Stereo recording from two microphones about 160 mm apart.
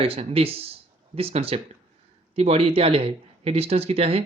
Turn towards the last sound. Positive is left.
turn(degrees=-40)  # may be behind; listen again after turning